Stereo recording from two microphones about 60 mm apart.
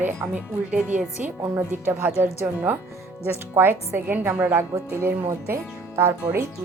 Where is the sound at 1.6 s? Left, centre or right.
Right.